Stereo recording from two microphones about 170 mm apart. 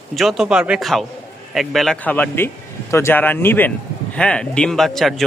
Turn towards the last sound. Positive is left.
turn(degrees=0)  # may be behind; listen again after turning